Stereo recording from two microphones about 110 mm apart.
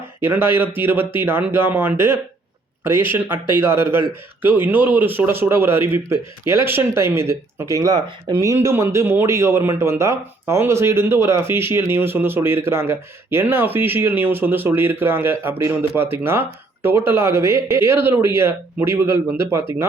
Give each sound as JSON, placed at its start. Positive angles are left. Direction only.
{"t": 0.2, "sound": "a man's voice", "side_deg": -20}
{"t": 3.6, "sound": "a man's voice", "side_deg": -20}